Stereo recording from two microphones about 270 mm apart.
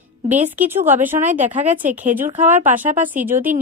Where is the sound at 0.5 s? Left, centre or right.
Centre.